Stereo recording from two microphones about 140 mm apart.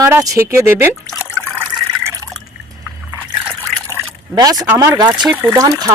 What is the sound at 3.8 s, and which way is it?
Liquid, 25° right (ahead or behind).